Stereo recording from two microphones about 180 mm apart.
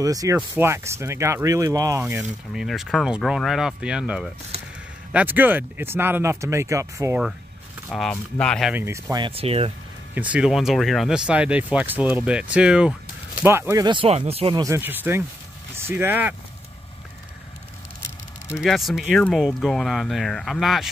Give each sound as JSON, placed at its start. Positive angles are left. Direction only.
{"t": 0.0, "sound": "speech", "side_deg": -20}
{"t": 2.5, "sound": "speech", "side_deg": 0}
{"t": 7.9, "sound": "speech", "side_deg": 5}
{"t": 8.7, "sound": "speech", "side_deg": -15}
{"t": 10.1, "sound": "speech", "side_deg": -5}
{"t": 14.6, "sound": "speech", "side_deg": -15}
{"t": 18.6, "sound": "speech", "side_deg": 0}